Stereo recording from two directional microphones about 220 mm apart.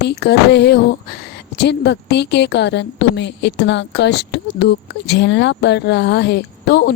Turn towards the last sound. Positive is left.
turn(degrees=50)  # may be behind; listen again after turning